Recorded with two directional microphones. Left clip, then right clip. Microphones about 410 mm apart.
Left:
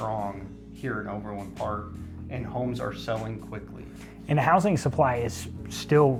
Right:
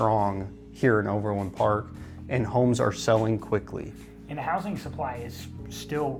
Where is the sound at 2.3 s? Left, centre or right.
Right.